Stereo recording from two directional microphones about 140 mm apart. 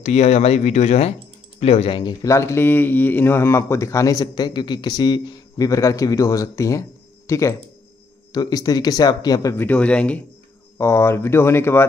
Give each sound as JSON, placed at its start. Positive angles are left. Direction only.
{"t": 0.0, "sound": "speech", "side_deg": 50}
{"t": 2.2, "sound": "speech", "side_deg": 20}
{"t": 9.7, "sound": "speech", "side_deg": 10}
{"t": 10.8, "sound": "speech", "side_deg": 20}